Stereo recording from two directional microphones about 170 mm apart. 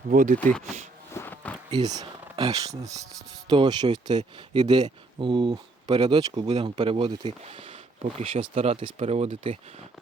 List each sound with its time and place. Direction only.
0.1 s speech: 50° right (ahead or behind)
1.1 s a sound: 10° left (ahead or behind)
1.8 s speech: 20° right (ahead or behind)